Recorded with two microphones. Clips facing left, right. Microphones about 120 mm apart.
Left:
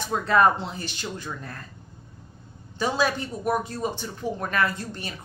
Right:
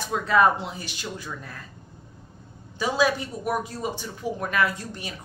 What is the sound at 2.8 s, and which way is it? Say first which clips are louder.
Speech: right 1 dB; 5° right (ahead or behind).